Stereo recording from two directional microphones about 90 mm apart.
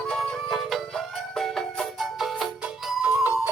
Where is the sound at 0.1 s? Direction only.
5° left (ahead or behind).